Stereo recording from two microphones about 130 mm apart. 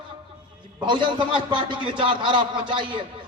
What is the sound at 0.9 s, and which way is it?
A man's voice, 40° right (ahead or behind).